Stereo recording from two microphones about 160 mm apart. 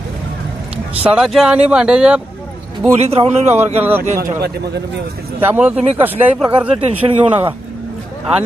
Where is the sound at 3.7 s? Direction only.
10° right (ahead or behind).